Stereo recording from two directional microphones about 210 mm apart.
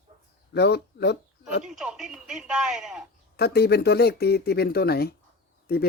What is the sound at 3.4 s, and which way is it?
Speech, 50° left (ahead or behind).